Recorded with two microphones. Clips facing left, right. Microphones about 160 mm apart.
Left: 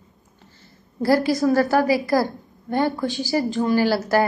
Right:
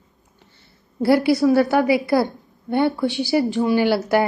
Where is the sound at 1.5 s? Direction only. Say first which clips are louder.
Even; 20° right (ahead or behind).